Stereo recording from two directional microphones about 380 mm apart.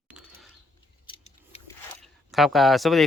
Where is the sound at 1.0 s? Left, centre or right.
Centre.